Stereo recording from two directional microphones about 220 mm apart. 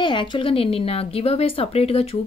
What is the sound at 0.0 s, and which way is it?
A woman's voice, 20° left (ahead or behind).